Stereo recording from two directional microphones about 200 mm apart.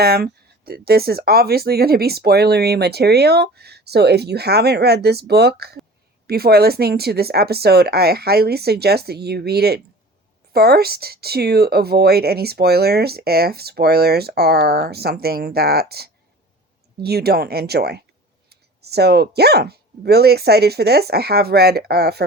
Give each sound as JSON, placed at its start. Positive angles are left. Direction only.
{"t": 0.0, "sound": "speech", "side_deg": -50}